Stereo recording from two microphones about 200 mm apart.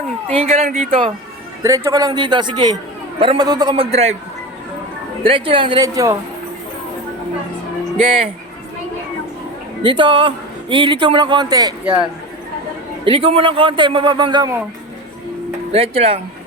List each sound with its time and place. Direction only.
0.3 s speech: 30° right (ahead or behind)
1.6 s a man's voice: 15° right (ahead or behind)
5.2 s a man's voice: 25° right (ahead or behind)
9.8 s a man's voice: 25° right (ahead or behind)
13.1 s a man's voice: 30° right (ahead or behind)
15.7 s a man's voice: 30° right (ahead or behind)